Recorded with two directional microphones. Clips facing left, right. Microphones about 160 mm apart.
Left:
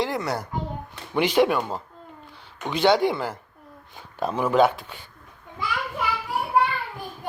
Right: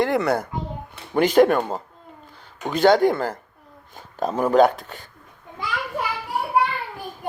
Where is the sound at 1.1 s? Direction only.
45° right (ahead or behind).